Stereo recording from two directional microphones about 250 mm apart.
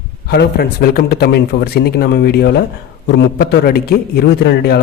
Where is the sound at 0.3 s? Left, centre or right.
Left.